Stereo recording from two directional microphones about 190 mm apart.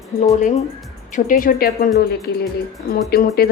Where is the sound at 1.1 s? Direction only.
45° left (ahead or behind).